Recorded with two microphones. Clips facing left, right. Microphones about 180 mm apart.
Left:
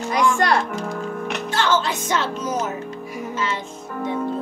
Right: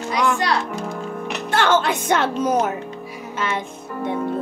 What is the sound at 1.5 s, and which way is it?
Speech, 60° right (ahead or behind).